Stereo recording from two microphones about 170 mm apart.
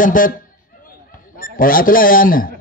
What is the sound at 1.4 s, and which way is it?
A man's voice, 55° left (ahead or behind).